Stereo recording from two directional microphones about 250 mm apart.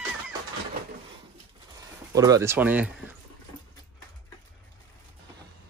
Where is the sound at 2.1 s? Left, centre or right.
Centre.